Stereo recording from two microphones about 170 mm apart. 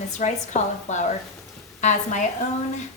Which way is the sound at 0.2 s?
45° left (ahead or behind).